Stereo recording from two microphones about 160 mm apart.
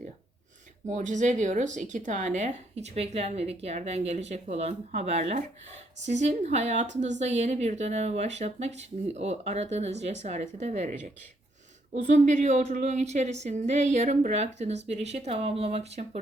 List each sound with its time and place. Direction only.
0.9 s speech: 50° right (ahead or behind)